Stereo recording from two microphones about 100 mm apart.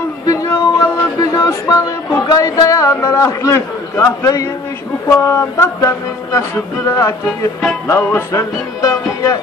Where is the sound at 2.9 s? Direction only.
30° left (ahead or behind).